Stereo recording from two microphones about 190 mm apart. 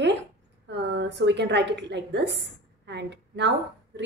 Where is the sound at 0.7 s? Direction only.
65° right (ahead or behind).